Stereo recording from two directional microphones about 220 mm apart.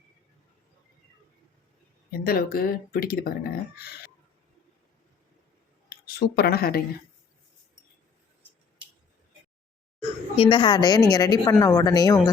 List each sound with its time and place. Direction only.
2.1 s speech: 45° left (ahead or behind)
6.1 s speech: 45° left (ahead or behind)
10.0 s a woman's voice: 25° left (ahead or behind)